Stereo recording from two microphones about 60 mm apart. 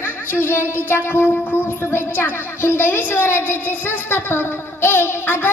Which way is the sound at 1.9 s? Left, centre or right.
Left.